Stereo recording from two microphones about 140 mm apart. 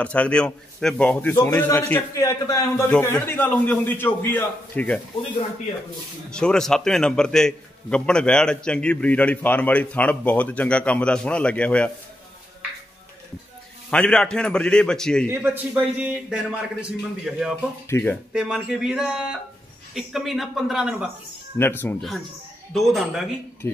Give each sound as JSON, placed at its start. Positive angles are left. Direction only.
{"t": 0.0, "sound": "a man's voice", "side_deg": 10}
{"t": 6.3, "sound": "a man's voice", "side_deg": 5}
{"t": 13.8, "sound": "a man's voice", "side_deg": 5}
{"t": 15.2, "sound": "a man's voice", "side_deg": -15}
{"t": 17.8, "sound": "a man's voice", "side_deg": 15}
{"t": 18.3, "sound": "a man's voice", "side_deg": -5}
{"t": 21.5, "sound": "a man's voice", "side_deg": 15}
{"t": 22.7, "sound": "a man's voice", "side_deg": 0}
{"t": 23.6, "sound": "a man's voice", "side_deg": 20}